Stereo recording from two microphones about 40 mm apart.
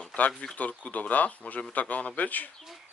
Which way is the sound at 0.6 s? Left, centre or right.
Left.